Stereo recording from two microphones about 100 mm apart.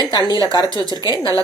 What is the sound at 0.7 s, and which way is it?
Speech, 40° right (ahead or behind).